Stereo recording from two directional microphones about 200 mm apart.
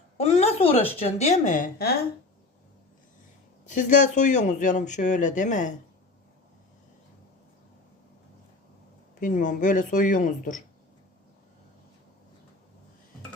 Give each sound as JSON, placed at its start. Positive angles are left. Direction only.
{"t": 0.2, "sound": "a woman's voice", "side_deg": 30}
{"t": 3.7, "sound": "speech", "side_deg": 40}
{"t": 9.2, "sound": "speech", "side_deg": 40}